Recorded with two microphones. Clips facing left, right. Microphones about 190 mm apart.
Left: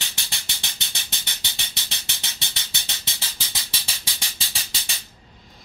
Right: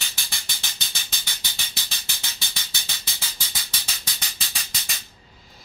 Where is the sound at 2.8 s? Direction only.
20° left (ahead or behind).